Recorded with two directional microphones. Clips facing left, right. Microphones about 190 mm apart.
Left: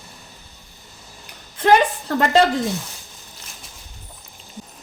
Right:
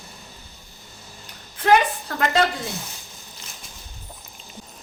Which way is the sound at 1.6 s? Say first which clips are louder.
Left 2 dB; 30° left (ahead or behind).